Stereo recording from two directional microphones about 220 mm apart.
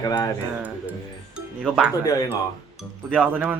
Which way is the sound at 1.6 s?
5° right (ahead or behind).